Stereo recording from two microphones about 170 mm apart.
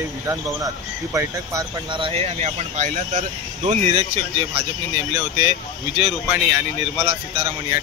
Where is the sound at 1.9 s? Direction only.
35° right (ahead or behind).